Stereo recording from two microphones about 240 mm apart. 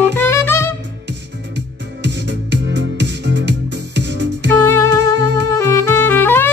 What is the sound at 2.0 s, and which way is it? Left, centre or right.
Music, right.